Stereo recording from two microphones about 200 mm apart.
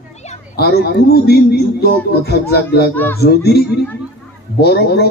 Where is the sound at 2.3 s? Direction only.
55° left (ahead or behind).